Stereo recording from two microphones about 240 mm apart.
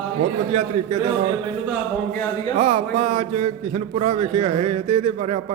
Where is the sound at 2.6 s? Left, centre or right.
Right.